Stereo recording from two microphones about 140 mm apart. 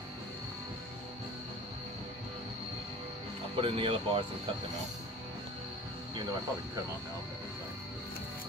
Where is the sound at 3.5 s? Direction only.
40° right (ahead or behind).